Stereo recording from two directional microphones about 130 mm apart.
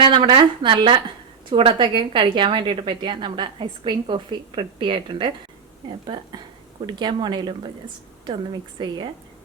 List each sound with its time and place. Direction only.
0.0 s a woman's voice: 40° right (ahead or behind)
6.8 s a woman's voice: 35° right (ahead or behind)
8.8 s a woman's voice: 40° right (ahead or behind)